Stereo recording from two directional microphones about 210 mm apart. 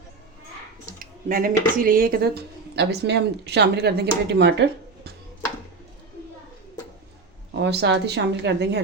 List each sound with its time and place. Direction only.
0.9 s speech: 40° right (ahead or behind)
7.6 s a woman's voice: 55° right (ahead or behind)